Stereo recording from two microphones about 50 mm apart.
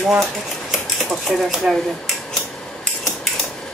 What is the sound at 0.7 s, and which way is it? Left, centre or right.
Speech, centre.